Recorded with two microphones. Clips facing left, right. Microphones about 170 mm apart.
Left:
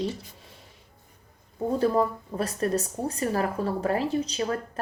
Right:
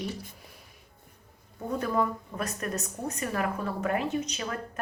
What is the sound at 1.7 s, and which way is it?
A woman's voice, 30° left (ahead or behind).